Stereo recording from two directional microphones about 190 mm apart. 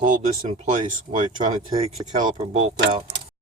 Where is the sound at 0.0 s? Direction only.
40° right (ahead or behind).